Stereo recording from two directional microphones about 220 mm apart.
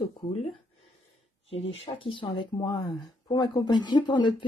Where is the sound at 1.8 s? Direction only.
25° left (ahead or behind).